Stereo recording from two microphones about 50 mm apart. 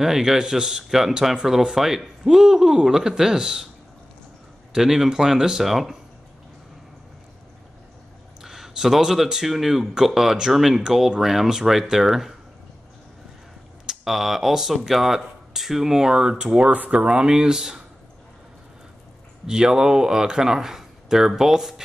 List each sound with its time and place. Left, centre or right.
0.0 s speech: centre
4.7 s speech: centre
8.4 s speech: centre
13.8 s speech: centre
16.7 s speech: right; by 17.8 s centre
19.4 s speech: centre